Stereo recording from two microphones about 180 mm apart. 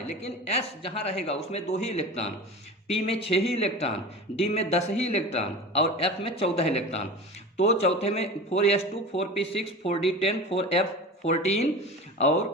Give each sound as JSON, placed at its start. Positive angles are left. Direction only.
{"t": 0.1, "sound": "a man's voice", "side_deg": 35}